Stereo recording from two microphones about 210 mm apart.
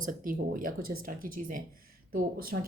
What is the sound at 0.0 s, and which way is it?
Speech, 40° right (ahead or behind).